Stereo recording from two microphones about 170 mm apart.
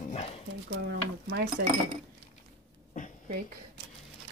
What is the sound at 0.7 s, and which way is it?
Speech, 85° right.